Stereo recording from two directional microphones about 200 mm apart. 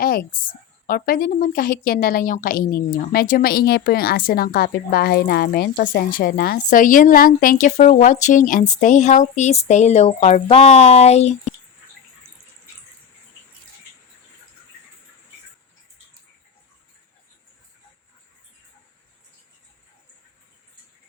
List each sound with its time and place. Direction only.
0.0 s speech: 50° left (ahead or behind)